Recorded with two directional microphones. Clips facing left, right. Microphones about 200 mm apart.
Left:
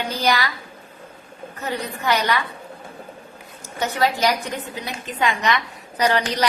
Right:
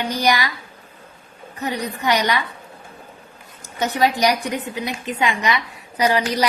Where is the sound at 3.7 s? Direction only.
15° right (ahead or behind).